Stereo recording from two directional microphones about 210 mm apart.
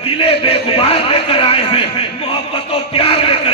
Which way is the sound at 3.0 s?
25° left (ahead or behind).